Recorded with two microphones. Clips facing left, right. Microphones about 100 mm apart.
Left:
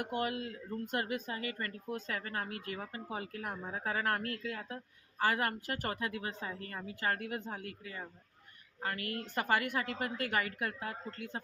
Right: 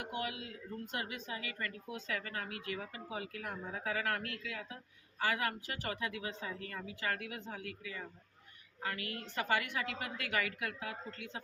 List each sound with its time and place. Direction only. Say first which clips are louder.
0.0 s speech: left 5 dB; 50° left (ahead or behind)